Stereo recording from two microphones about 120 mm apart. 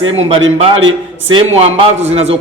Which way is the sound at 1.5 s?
65° right (ahead or behind).